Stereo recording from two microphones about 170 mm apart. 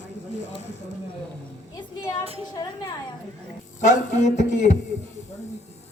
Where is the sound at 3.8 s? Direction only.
45° left (ahead or behind).